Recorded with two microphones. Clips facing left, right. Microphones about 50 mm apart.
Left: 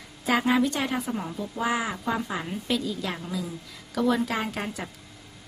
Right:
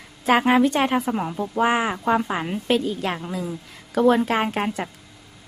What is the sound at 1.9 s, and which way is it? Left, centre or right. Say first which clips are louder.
A woman's voice: right 7 dB; right.